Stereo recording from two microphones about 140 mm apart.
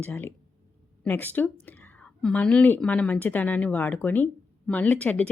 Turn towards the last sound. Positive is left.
turn(degrees=10)  # may be behind; listen again after turning